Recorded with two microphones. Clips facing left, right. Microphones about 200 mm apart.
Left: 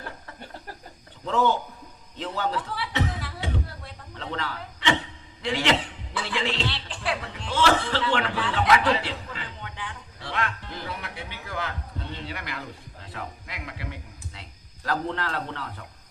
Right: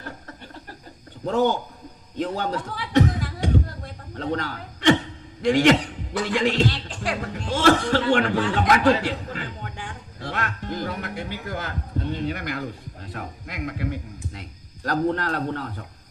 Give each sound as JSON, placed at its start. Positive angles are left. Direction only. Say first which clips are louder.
{"t": 1.2, "sound": "a man's voice", "louder": "right 3 dB", "side_deg": -45}
{"t": 2.1, "sound": "a sound", "louder": "right 3 dB", "side_deg": -45}
{"t": 5.4, "sound": "a man's voice", "louder": "right 8 dB", "side_deg": -45}